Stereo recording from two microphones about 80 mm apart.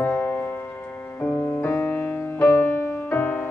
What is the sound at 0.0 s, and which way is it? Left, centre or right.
Music, centre.